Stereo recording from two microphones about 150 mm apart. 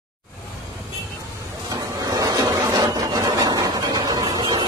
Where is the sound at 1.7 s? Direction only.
25° right (ahead or behind).